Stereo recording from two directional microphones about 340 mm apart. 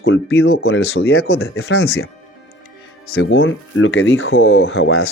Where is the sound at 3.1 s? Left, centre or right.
Left.